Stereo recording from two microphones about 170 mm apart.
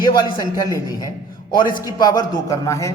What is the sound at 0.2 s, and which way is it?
A man's voice, 25° left (ahead or behind).